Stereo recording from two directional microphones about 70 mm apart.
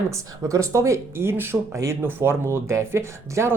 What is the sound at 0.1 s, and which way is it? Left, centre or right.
Speech, right.